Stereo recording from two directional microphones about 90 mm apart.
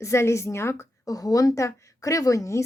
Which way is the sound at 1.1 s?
40° left (ahead or behind).